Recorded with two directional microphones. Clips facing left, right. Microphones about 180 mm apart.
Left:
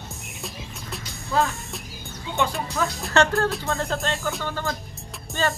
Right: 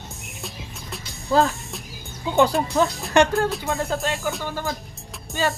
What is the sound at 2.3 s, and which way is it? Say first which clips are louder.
Speech: right 7 dB; 40° right (ahead or behind).